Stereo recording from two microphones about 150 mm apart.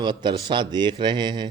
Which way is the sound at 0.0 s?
30° right (ahead or behind).